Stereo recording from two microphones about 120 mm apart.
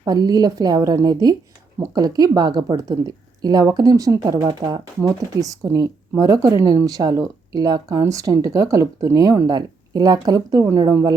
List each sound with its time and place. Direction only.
0.0 s speech: 35° right (ahead or behind)